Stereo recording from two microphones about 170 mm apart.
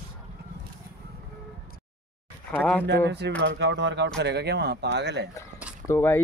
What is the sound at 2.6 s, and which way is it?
Speech, 10° left (ahead or behind).